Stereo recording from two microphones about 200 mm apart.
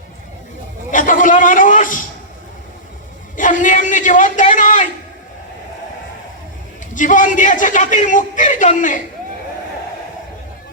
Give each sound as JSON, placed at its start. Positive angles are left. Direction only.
{"t": 0.9, "sound": "a sound", "side_deg": 40}
{"t": 3.3, "sound": "a man's voice", "side_deg": 40}
{"t": 6.9, "sound": "a man's voice", "side_deg": 40}